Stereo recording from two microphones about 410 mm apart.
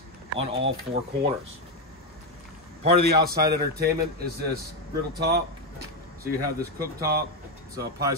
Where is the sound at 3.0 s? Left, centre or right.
Right.